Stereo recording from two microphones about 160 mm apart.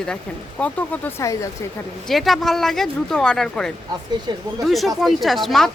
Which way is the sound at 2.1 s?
Centre (ahead or behind).